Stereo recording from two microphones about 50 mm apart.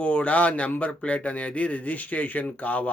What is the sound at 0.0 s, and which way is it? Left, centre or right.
Speech, left.